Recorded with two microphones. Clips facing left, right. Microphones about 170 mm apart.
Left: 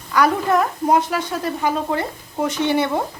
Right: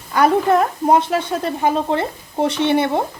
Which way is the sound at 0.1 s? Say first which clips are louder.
Right 3 dB; 30° right (ahead or behind).